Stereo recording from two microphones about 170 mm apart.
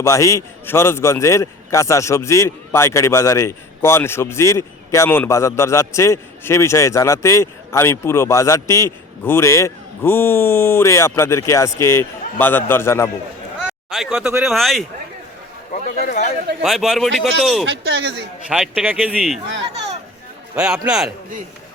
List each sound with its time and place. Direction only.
0.0 s a man's voice: 20° left (ahead or behind)
13.7 s speech: centre (ahead or behind)
15.7 s a man's voice: 50° left (ahead or behind)
16.6 s speech: centre (ahead or behind)
17.7 s a man's voice: 90° right
18.4 s speech: 5° right (ahead or behind)
20.6 s speech: 5° right (ahead or behind)